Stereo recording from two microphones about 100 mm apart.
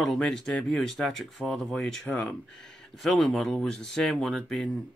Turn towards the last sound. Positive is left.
turn(degrees=5)  # may be behind; listen again after turning